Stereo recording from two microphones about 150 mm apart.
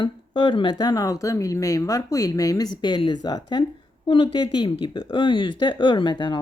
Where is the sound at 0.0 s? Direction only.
35° left (ahead or behind).